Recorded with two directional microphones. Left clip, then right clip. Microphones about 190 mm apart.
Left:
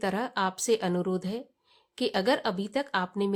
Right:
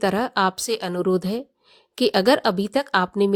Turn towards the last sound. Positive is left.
turn(degrees=-40)  # may be behind; listen again after turning